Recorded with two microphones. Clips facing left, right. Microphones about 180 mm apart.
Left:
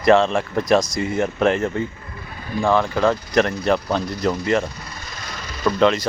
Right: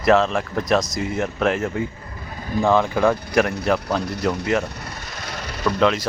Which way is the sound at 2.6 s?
15° right (ahead or behind).